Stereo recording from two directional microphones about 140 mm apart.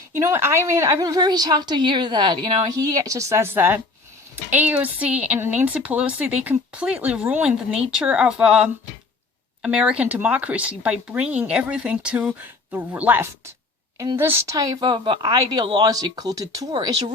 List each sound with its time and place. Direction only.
0.1 s a woman's voice: 20° right (ahead or behind)